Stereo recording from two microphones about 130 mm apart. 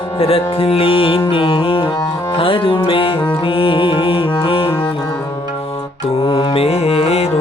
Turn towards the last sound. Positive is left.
turn(degrees=50)  # may be behind; listen again after turning